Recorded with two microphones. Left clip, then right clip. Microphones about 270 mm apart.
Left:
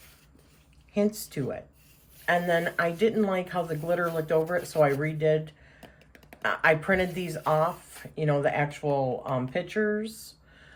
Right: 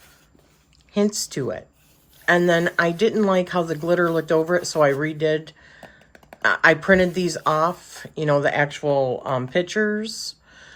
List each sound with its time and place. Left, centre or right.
0.9 s speech: centre